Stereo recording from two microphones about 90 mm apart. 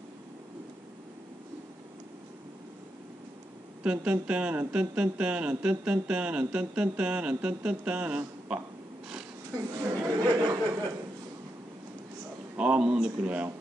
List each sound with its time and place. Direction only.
3.8 s speech: 10° right (ahead or behind)
9.8 s chatter: 45° right (ahead or behind)
12.5 s speech: 10° right (ahead or behind)